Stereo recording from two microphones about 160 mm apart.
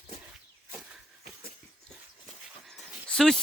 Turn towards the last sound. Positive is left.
turn(degrees=5)  # may be behind; listen again after turning